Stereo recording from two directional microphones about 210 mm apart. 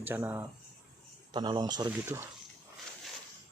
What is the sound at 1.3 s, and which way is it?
Speech, 20° right (ahead or behind).